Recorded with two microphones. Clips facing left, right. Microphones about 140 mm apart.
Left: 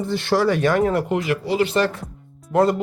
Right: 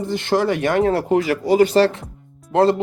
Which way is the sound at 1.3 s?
45° right (ahead or behind).